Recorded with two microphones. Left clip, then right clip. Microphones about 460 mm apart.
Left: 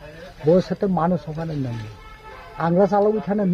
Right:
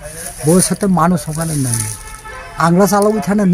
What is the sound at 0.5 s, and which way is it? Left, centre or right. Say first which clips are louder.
Speech: right 6 dB; left.